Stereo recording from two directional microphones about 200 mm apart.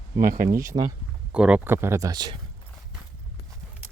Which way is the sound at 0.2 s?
45° right (ahead or behind).